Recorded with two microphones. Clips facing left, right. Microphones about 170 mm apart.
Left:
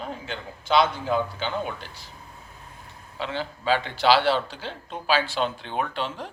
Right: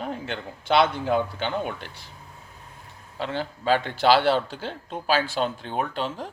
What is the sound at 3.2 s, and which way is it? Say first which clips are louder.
A man's voice: right 1 dB; 50° right (ahead or behind).